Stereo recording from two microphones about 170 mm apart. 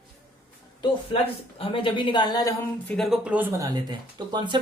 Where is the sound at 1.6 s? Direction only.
30° left (ahead or behind).